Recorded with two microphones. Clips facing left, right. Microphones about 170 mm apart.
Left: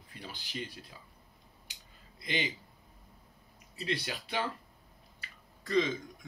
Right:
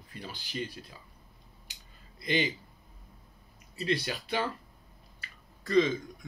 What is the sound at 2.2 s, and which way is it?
Speech, 15° left (ahead or behind).